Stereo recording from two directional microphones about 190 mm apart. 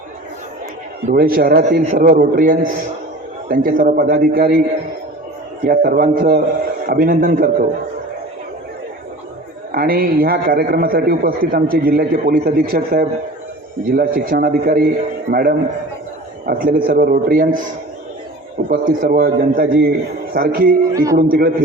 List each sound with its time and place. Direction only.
1.0 s a man's voice: 50° right (ahead or behind)
5.6 s a man's voice: 50° right (ahead or behind)
9.7 s a man's voice: 50° right (ahead or behind)
18.7 s a man's voice: 55° right (ahead or behind)
20.9 s a man's voice: 15° right (ahead or behind)
21.2 s a man's voice: 50° right (ahead or behind)